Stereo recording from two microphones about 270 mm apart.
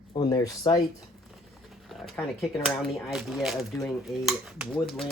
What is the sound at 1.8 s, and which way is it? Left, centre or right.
Speech, centre.